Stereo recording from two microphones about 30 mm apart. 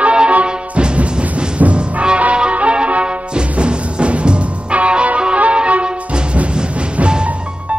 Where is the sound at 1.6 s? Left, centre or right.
Right.